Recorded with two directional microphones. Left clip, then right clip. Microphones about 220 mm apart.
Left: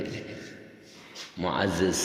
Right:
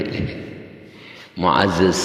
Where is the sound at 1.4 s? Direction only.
30° right (ahead or behind).